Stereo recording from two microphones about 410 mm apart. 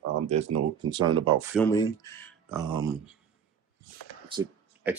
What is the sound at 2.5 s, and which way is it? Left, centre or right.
Speech, centre.